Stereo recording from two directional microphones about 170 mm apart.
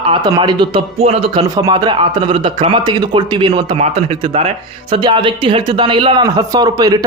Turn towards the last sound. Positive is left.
turn(degrees=-25)  # may be behind; listen again after turning